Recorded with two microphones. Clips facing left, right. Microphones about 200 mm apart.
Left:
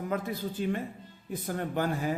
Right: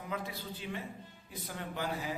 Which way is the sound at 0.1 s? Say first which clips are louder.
Left 5 dB; 45° left (ahead or behind).